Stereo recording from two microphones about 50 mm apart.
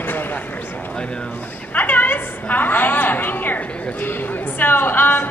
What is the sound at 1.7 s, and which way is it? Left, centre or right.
A woman's voice, left.